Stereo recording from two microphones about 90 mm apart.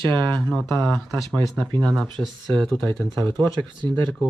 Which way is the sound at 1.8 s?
5° left (ahead or behind).